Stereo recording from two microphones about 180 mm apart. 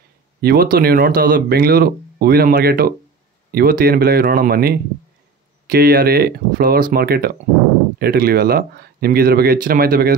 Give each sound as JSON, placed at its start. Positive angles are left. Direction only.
{"t": 0.4, "sound": "speech", "side_deg": -60}